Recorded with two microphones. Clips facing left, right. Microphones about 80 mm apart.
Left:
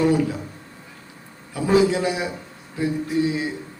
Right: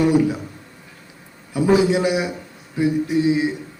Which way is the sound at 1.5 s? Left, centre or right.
Centre.